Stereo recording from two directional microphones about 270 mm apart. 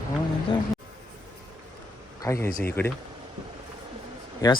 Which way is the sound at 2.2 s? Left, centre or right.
Centre.